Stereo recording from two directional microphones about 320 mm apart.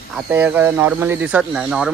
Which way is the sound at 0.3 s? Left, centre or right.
Centre.